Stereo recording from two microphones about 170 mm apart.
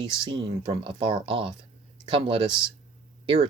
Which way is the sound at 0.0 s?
25° right (ahead or behind).